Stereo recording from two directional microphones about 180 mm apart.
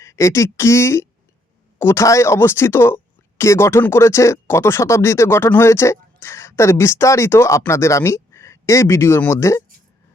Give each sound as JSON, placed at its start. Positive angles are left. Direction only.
{"t": 0.0, "sound": "speech", "side_deg": 15}